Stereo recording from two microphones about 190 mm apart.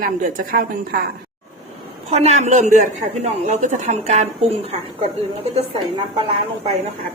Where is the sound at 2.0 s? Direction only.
35° right (ahead or behind).